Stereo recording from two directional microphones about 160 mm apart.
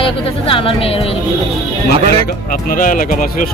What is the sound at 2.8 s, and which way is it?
Speech, 55° left (ahead or behind).